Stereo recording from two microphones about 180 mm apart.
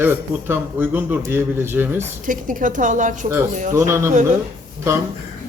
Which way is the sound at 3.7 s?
15° right (ahead or behind).